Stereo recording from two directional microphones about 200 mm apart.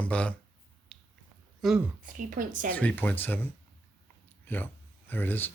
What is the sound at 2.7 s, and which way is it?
Speech, 10° left (ahead or behind).